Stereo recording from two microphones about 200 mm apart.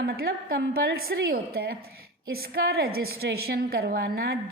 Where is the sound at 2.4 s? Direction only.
50° right (ahead or behind).